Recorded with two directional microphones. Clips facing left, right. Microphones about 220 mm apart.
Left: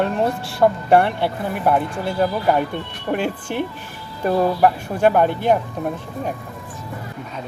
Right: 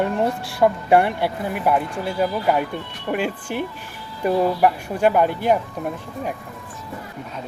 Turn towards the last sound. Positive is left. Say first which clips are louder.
# left 2 dB
turn(degrees=-5)  # may be behind; listen again after turning